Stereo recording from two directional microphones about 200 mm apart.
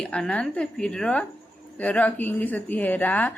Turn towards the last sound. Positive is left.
turn(degrees=10)  # may be behind; listen again after turning